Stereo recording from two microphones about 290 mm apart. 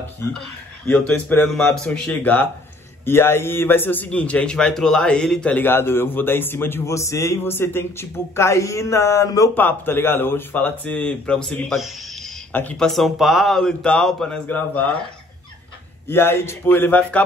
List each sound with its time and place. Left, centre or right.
0.8 s a man's voice: centre
16.1 s a man's voice: centre